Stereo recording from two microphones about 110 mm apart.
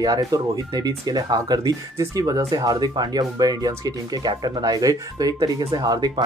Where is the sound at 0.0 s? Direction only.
35° right (ahead or behind).